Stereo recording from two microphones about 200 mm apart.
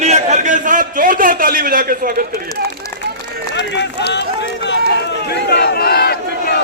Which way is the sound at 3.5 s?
60° left (ahead or behind).